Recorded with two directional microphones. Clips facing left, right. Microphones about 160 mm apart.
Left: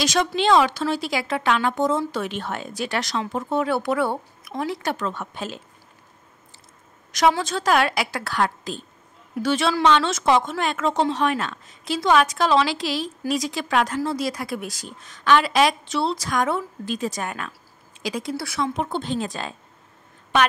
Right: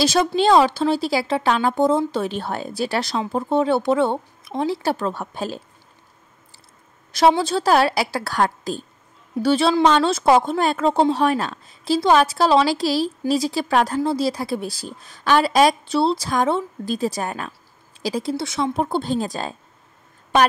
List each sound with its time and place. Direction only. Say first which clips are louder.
0.0 s speech: right 4 dB; 30° right (ahead or behind)
7.1 s speech: right 3 dB; 30° right (ahead or behind)
18.3 s speech: right 2 dB; 20° right (ahead or behind)
18.7 s speech: right 4 dB; 35° right (ahead or behind)